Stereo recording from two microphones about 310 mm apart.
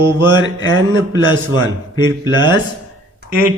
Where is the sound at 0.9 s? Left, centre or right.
Centre.